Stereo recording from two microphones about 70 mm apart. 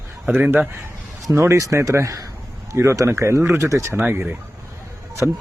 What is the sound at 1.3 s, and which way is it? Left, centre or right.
Speech, right.